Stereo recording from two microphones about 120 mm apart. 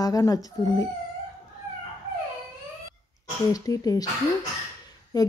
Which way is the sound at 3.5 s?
30° left (ahead or behind).